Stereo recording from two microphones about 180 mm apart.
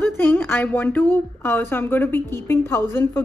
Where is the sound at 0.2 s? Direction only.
10° left (ahead or behind).